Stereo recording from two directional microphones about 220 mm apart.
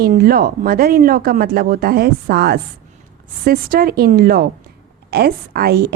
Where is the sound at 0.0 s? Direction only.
45° right (ahead or behind).